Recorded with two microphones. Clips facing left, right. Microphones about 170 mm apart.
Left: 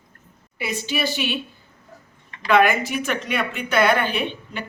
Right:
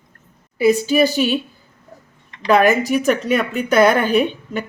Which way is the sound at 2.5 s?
40° right (ahead or behind).